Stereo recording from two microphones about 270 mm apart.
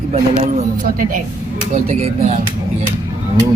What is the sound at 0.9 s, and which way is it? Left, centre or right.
A woman's voice, right.